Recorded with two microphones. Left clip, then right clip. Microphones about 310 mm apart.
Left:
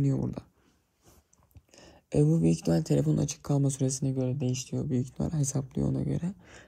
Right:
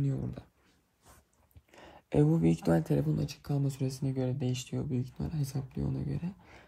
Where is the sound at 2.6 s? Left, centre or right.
Right.